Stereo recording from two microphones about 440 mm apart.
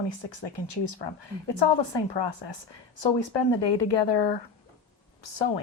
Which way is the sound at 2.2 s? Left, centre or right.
Left.